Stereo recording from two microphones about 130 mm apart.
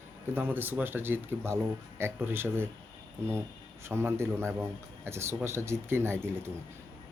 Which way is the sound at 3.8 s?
20° right (ahead or behind).